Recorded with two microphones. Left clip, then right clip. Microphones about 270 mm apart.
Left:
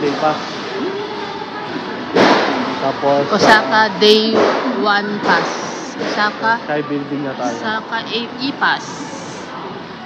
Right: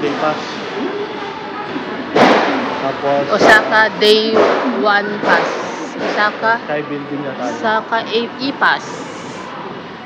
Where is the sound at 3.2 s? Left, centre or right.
Centre.